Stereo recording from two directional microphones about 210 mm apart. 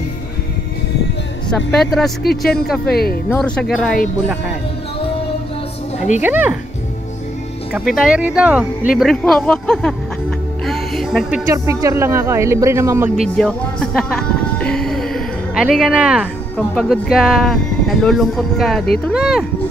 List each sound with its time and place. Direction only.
1.5 s speech: centre (ahead or behind)
2.9 s speech: 45° left (ahead or behind)
3.3 s speech: 5° left (ahead or behind)
6.2 s speech: 10° right (ahead or behind)
7.7 s speech: centre (ahead or behind)
10.7 s music: centre (ahead or behind)
11.4 s speech: 15° right (ahead or behind)
13.4 s speech: 5° left (ahead or behind)